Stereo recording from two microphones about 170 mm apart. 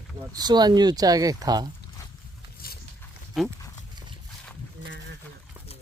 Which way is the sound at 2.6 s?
60° left (ahead or behind).